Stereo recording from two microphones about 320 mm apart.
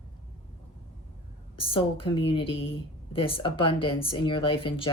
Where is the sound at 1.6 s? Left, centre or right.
Centre.